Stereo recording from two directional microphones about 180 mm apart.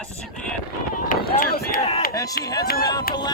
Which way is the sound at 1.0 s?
55° left (ahead or behind).